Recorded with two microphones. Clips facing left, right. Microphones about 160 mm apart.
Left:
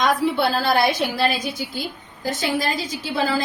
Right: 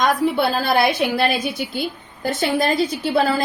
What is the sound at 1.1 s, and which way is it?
A woman's voice, 60° right (ahead or behind).